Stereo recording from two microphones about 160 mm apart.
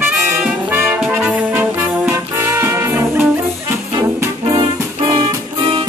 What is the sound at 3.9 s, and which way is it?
Music, 25° right (ahead or behind).